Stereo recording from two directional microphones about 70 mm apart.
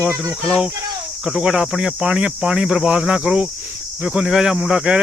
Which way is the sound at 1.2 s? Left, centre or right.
Centre.